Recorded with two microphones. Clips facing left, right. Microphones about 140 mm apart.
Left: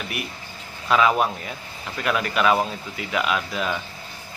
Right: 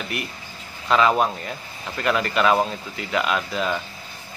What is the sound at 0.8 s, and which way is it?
Speech, 5° left (ahead or behind).